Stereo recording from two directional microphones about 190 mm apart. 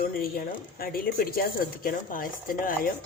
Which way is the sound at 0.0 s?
50° left (ahead or behind).